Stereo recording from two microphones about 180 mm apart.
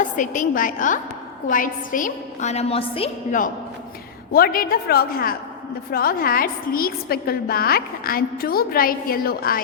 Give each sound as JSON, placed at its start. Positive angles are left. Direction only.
{"t": 0.0, "sound": "a woman's voice", "side_deg": 45}
{"t": 4.3, "sound": "a woman's voice", "side_deg": 55}